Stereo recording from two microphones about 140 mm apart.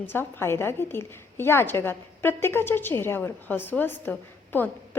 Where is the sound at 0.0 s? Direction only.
15° left (ahead or behind).